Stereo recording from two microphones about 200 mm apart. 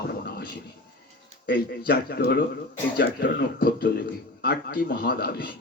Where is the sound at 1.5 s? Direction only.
55° left (ahead or behind).